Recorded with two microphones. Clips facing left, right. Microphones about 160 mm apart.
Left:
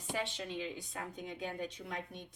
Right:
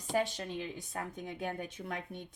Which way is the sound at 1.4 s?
55° right (ahead or behind).